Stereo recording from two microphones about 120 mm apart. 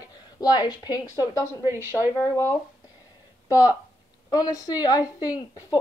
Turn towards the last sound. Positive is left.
turn(degrees=30)  # may be behind; listen again after turning